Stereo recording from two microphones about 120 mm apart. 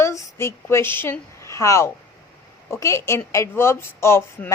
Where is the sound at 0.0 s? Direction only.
25° left (ahead or behind).